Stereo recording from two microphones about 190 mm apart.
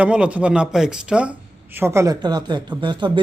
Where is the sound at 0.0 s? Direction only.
5° right (ahead or behind).